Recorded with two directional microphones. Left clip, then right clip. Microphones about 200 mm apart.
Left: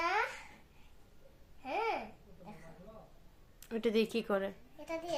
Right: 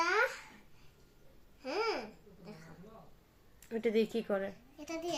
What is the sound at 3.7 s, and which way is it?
A woman's voice, 15° left (ahead or behind).